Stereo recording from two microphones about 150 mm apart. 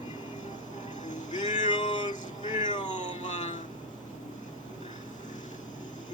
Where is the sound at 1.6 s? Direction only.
30° left (ahead or behind).